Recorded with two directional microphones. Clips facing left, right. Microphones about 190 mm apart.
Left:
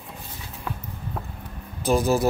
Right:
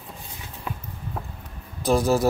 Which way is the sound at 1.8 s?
Centre (ahead or behind).